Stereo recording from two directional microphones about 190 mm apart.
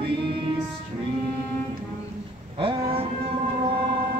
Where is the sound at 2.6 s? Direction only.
30° right (ahead or behind).